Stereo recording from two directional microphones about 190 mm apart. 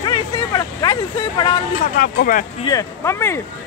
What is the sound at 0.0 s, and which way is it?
Vehicle, 20° left (ahead or behind).